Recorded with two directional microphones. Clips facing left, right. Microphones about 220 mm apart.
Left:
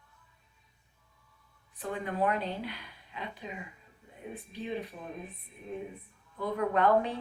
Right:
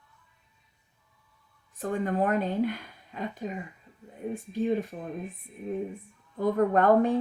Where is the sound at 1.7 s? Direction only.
45° right (ahead or behind).